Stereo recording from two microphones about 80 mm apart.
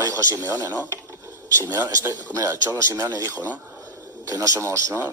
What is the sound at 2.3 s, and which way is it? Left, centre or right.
Speech, right.